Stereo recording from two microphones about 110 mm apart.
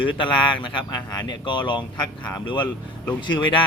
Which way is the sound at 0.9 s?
35° left (ahead or behind).